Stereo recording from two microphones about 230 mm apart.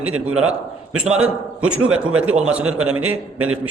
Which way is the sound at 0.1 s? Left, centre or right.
Right.